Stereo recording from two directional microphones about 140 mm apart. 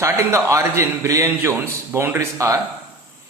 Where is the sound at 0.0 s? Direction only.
20° right (ahead or behind).